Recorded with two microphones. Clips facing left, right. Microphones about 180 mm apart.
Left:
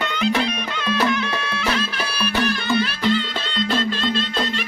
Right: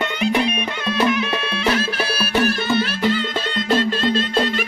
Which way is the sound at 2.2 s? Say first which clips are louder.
Right 2 dB; 35° right (ahead or behind).